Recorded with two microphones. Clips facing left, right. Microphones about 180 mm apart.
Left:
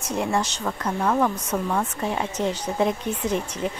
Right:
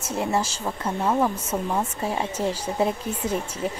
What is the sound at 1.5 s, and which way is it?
Speech, 25° right (ahead or behind).